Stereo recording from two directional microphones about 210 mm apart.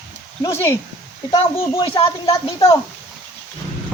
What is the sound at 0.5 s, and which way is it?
Speech, 10° left (ahead or behind).